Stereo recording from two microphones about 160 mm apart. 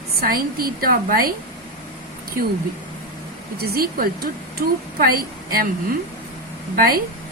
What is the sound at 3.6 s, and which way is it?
Speech, 70° right (ahead or behind).